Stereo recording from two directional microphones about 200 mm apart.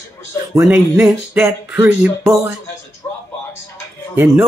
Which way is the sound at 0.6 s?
15° right (ahead or behind).